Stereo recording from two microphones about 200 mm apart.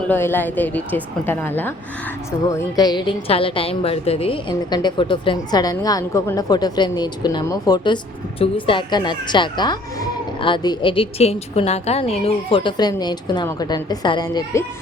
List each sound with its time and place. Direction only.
0.1 s a woman's voice: 10° left (ahead or behind)